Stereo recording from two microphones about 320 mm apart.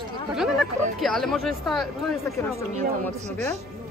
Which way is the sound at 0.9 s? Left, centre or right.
Centre.